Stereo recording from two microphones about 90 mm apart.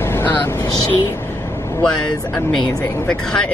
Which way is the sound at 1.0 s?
25° left (ahead or behind).